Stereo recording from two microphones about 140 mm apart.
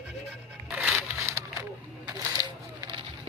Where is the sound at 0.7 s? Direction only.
5° right (ahead or behind).